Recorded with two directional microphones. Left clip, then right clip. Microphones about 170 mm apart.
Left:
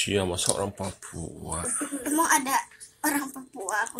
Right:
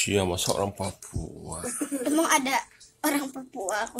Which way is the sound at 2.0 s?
35° right (ahead or behind).